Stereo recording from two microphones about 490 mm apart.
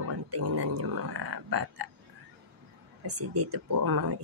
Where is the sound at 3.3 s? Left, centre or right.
Right.